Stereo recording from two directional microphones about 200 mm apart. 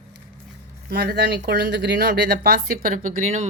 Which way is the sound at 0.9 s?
50° right (ahead or behind).